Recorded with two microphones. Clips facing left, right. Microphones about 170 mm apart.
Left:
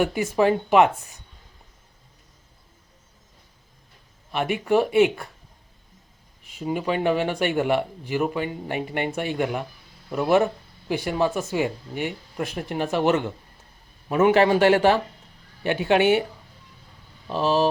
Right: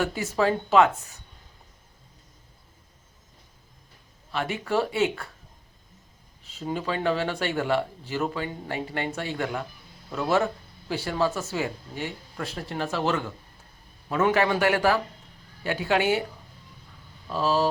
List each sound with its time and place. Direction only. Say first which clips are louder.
0.0 s speech: left 4 dB; 15° left (ahead or behind)
4.3 s speech: left 6 dB; 15° left (ahead or behind)
6.4 s a man's voice: left 4 dB; 15° left (ahead or behind)
17.2 s a man's voice: left 3 dB; 20° left (ahead or behind)